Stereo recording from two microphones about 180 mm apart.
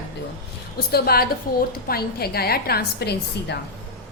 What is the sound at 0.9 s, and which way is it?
A woman's voice, 55° left (ahead or behind).